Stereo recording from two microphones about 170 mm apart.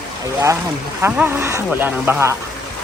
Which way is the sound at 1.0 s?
10° right (ahead or behind).